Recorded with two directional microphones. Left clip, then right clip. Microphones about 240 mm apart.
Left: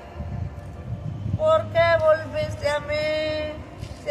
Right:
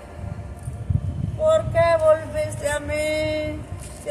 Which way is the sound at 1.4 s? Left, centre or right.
Centre.